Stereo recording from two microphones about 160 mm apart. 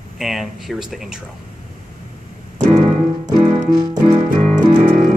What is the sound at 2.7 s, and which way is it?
Piano, 40° right (ahead or behind).